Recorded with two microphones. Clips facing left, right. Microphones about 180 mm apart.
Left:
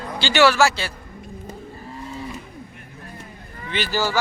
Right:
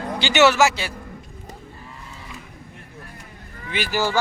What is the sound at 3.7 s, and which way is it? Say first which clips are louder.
Speech: even; 15° right (ahead or behind).